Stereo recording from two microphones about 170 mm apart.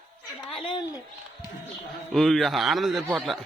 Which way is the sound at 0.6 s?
30° left (ahead or behind).